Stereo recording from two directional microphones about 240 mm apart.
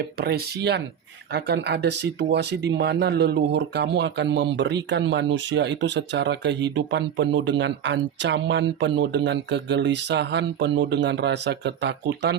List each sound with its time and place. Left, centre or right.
0.0 s speech: right